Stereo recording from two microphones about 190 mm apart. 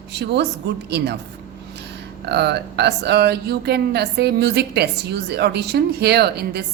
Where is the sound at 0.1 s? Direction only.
65° right (ahead or behind).